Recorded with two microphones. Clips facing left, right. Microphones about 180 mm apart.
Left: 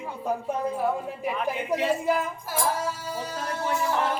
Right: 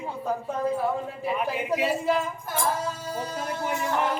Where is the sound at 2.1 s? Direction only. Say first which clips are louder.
Even; 10° left (ahead or behind).